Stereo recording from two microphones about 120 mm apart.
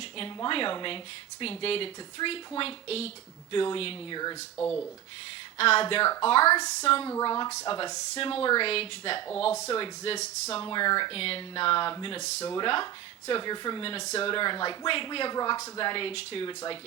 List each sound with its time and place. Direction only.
0.4 s speech: 45° left (ahead or behind)
4.6 s speech: 60° left (ahead or behind)
7.3 s speech: 35° left (ahead or behind); by 10.6 s 60° left (ahead or behind)
10.6 s speech: 40° left (ahead or behind)
15.9 s speech: 45° left (ahead or behind)